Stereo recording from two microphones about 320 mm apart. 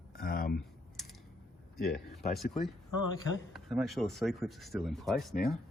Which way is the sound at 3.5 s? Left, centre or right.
Centre.